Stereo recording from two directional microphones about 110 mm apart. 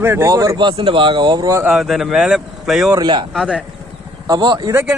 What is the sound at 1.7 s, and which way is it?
Speech, 5° right (ahead or behind).